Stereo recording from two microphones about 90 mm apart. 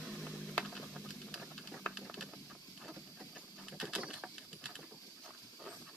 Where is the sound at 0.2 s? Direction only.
Centre (ahead or behind).